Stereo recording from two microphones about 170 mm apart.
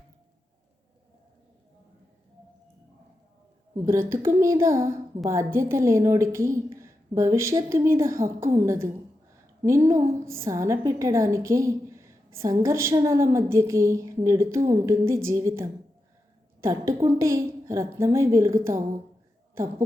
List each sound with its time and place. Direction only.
3.8 s a woman's voice: 15° right (ahead or behind)